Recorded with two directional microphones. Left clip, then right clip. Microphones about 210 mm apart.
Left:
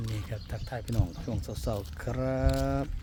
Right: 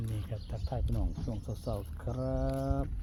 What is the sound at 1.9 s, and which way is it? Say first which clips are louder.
Speech: left 5 dB; 25° left (ahead or behind).